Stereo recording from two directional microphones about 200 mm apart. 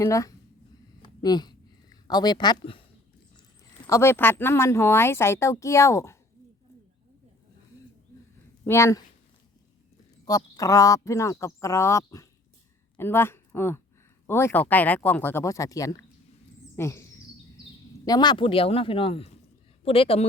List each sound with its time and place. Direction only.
0.0 s speech: 15° left (ahead or behind)
1.0 s a sound: 20° left (ahead or behind)
3.8 s speech: 15° left (ahead or behind)
8.6 s speech: 15° left (ahead or behind)
10.2 s speech: 15° left (ahead or behind)